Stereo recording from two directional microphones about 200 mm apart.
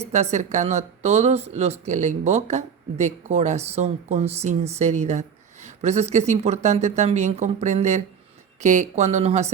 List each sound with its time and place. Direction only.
0.0 s speech: 35° right (ahead or behind)